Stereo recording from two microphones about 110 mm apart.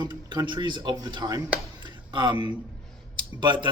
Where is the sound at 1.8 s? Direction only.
40° right (ahead or behind).